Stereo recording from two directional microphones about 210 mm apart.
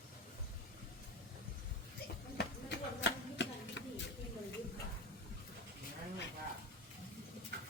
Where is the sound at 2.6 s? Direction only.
55° left (ahead or behind).